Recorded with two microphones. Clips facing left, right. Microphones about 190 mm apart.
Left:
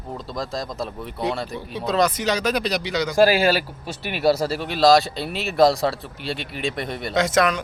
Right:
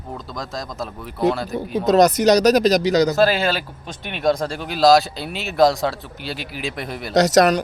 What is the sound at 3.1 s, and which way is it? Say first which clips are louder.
Speech: left 1 dB; 10° left (ahead or behind).